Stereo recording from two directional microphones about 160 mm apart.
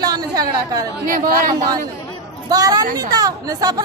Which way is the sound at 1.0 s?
60° right (ahead or behind).